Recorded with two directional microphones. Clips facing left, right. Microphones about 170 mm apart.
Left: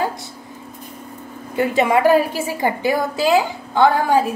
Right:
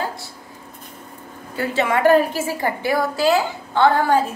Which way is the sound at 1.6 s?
15° left (ahead or behind).